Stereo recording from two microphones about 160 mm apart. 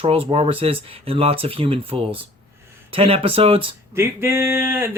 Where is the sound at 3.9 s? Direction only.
15° right (ahead or behind).